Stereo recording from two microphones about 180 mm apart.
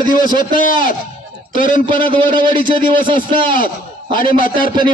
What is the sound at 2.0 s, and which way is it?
A man's voice, 30° right (ahead or behind).